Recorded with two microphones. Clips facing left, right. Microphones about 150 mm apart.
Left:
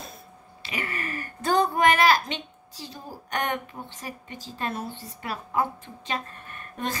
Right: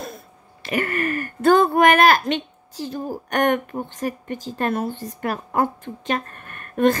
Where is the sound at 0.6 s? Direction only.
55° right (ahead or behind).